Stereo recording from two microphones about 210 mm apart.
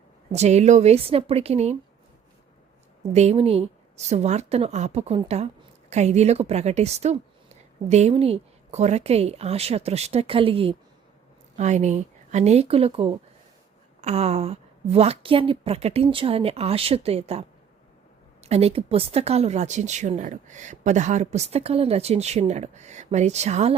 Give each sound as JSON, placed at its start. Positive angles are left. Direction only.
{"t": 0.3, "sound": "speech", "side_deg": -30}
{"t": 3.1, "sound": "a woman's voice", "side_deg": -30}
{"t": 18.4, "sound": "speech", "side_deg": -30}